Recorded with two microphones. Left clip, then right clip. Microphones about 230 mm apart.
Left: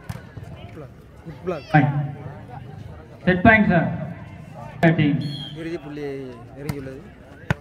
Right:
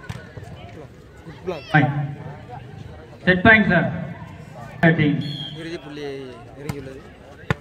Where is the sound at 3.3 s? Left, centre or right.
Left.